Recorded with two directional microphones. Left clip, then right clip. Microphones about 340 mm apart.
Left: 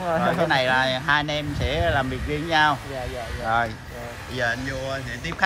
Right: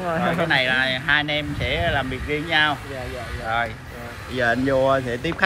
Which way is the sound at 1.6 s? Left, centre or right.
Left.